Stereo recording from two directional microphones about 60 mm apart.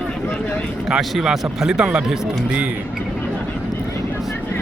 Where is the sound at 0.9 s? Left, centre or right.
Centre.